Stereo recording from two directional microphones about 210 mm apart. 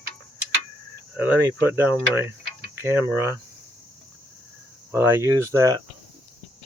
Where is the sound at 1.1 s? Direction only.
10° right (ahead or behind).